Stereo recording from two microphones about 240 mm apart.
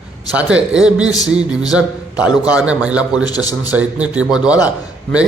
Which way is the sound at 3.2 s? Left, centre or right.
Centre.